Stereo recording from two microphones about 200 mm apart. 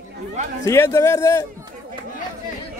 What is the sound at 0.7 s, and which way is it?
Speech, 15° left (ahead or behind).